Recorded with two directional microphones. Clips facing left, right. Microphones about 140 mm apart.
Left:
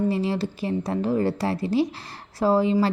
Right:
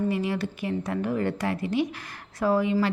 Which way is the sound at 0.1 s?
30° left (ahead or behind).